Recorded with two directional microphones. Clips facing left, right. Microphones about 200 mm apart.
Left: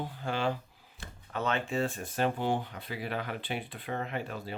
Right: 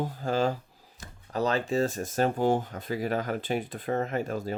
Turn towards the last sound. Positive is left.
turn(degrees=-45)  # may be behind; listen again after turning